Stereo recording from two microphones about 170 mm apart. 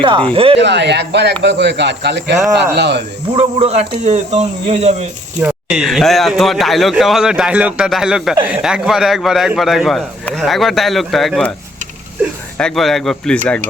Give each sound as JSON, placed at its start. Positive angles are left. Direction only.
{"t": 0.0, "sound": "speech", "side_deg": -30}
{"t": 0.6, "sound": "speech", "side_deg": -90}
{"t": 3.3, "sound": "speech", "side_deg": -35}
{"t": 5.6, "sound": "a man's voice", "side_deg": -5}
{"t": 12.5, "sound": "a man's voice", "side_deg": 5}